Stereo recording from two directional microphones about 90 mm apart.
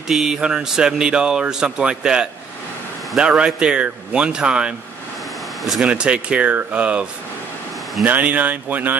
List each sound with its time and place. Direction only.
0.1 s speech: 5° right (ahead or behind)
5.9 s speech: 10° right (ahead or behind)
8.1 s speech: 15° right (ahead or behind)